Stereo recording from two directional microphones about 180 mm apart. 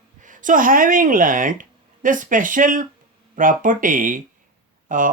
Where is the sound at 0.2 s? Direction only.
45° right (ahead or behind).